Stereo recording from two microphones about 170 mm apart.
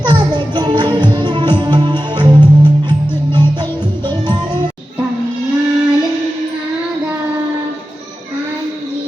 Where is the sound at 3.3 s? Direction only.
25° right (ahead or behind).